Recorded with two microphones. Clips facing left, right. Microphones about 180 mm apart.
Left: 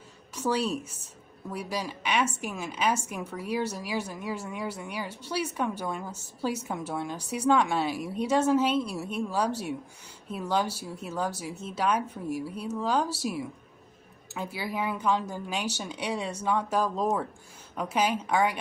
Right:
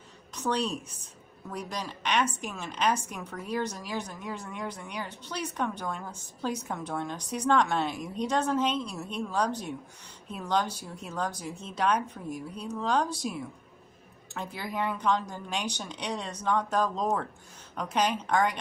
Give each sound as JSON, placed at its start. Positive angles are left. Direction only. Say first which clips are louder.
{"t": 0.3, "sound": "a woman's voice", "louder": "left 2 dB", "side_deg": 10}